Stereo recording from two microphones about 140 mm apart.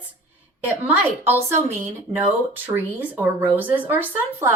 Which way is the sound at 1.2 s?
15° right (ahead or behind).